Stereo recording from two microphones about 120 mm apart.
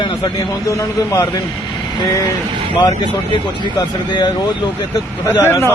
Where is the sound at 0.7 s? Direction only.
25° left (ahead or behind).